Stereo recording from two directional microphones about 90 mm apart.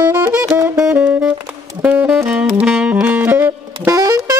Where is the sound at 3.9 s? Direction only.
40° right (ahead or behind).